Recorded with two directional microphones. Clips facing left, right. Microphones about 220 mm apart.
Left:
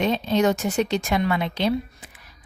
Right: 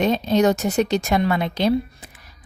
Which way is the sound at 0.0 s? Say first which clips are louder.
Right 3 dB; 40° right (ahead or behind).